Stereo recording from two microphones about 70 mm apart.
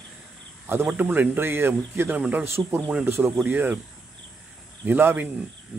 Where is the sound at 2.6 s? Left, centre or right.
Right.